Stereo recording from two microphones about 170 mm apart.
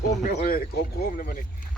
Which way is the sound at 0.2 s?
50° left (ahead or behind).